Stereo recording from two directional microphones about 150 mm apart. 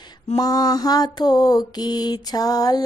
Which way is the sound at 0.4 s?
25° left (ahead or behind).